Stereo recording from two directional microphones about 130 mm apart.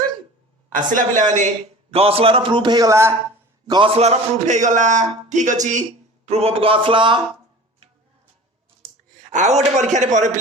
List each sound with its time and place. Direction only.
0.7 s a man's voice: 85° right; by 3.2 s 20° right (ahead or behind)
3.7 s a man's voice: 40° right (ahead or behind); by 5.8 s 70° right (ahead or behind)
6.2 s a man's voice: 50° right (ahead or behind)
9.3 s a man's voice: 65° right (ahead or behind)